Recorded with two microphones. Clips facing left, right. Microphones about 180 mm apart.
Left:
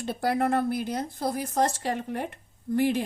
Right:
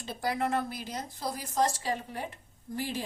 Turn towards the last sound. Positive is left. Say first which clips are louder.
# left 11 dB
turn(degrees=60)  # may be behind; listen again after turning